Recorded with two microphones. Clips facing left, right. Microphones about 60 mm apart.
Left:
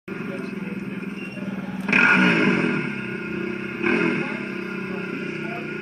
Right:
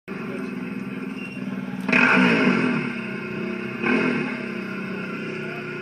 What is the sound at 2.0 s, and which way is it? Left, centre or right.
Vehicle, right.